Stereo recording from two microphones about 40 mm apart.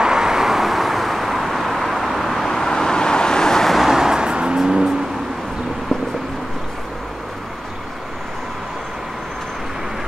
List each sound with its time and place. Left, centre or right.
0.0 s vehicle: centre
3.7 s music: centre; by 4.6 s right
4.6 s car: centre